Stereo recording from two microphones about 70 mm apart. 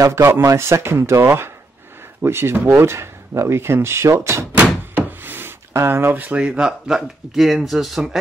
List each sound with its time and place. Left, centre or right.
0.1 s speech: right
4.9 s a sound: right
6.4 s speech: centre